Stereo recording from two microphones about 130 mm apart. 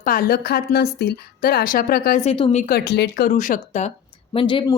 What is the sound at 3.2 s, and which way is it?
Speech, 85° left.